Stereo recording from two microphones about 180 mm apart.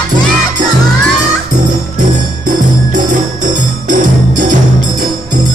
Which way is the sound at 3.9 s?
45° right (ahead or behind).